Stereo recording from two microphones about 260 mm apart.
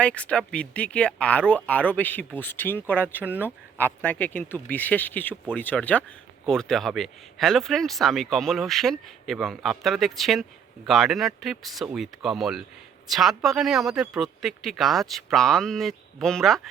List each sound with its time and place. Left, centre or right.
0.0 s speech: centre